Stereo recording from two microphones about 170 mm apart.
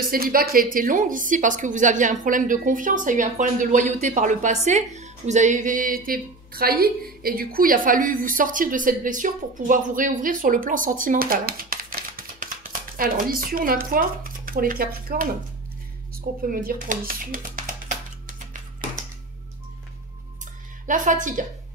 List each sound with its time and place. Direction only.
0.0 s a woman's voice: 60° right (ahead or behind)
16.4 s speech: 55° right (ahead or behind)
20.8 s a woman's voice: 50° right (ahead or behind)